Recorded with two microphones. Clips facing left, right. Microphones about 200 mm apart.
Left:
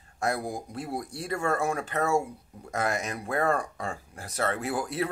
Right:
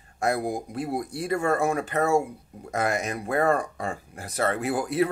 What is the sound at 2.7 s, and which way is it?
Speech, 55° right (ahead or behind).